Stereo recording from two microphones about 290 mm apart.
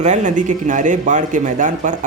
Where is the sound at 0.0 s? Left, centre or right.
Right.